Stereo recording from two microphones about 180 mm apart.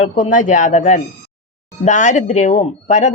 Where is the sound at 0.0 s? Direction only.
45° left (ahead or behind).